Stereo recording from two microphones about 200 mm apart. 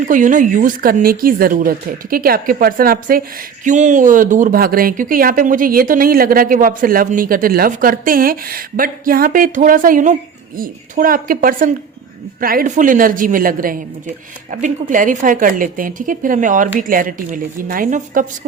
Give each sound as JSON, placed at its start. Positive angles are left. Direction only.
{"t": 0.0, "sound": "a woman's voice", "side_deg": -40}